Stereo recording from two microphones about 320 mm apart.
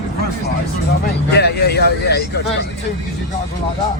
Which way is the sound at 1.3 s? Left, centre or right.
Left.